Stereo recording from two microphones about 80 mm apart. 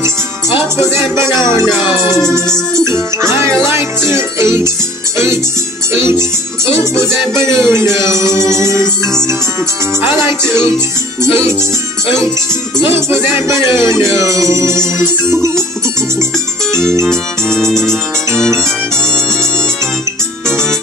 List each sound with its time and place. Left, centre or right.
0.7 s music: right
2.4 s music: centre
2.8 s music: right
6.7 s music: right
11.2 s music: right
12.8 s music: right
17.6 s music: centre
18.3 s music: right